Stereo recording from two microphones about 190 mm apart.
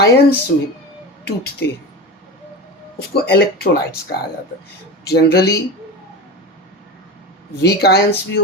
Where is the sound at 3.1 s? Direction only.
55° left (ahead or behind).